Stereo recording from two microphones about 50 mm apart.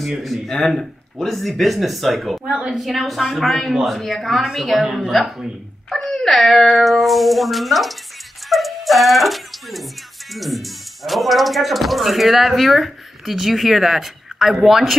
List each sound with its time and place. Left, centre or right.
0.0 s speech: centre
2.4 s a woman's voice: centre
2.8 s speech: centre
5.9 s speech: centre
8.5 s dog: centre
10.3 s speech: centre